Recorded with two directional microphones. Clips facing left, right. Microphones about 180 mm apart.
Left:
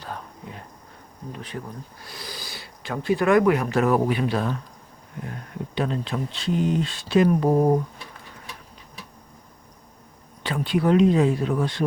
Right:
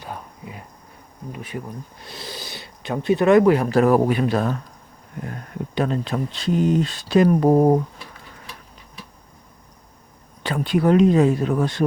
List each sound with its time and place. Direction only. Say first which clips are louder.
0.0 s a sound: right 1 dB; 10° right (ahead or behind)
1.3 s insect: right 3 dB; 10° right (ahead or behind)
2.0 s speech: right 3 dB; 25° right (ahead or behind); by 4.5 s 45° right (ahead or behind)
5.7 s speech: right 4 dB; 45° right (ahead or behind)
10.4 s speech: right 3 dB; 45° right (ahead or behind)